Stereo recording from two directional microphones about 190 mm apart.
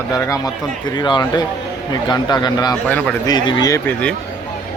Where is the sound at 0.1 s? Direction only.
20° left (ahead or behind).